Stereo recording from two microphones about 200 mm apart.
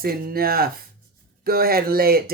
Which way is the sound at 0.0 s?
50° right (ahead or behind).